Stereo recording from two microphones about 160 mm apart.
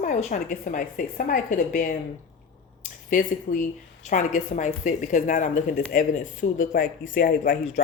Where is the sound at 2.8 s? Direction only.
55° left (ahead or behind).